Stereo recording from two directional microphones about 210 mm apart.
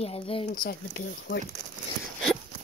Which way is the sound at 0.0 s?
25° left (ahead or behind).